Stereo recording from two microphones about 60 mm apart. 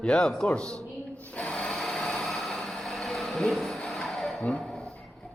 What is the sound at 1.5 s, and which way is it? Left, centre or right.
Vehicle, centre.